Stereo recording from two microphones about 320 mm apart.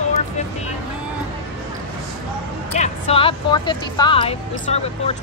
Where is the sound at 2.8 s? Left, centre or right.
Centre.